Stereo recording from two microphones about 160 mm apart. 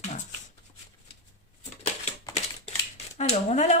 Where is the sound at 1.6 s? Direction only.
45° left (ahead or behind).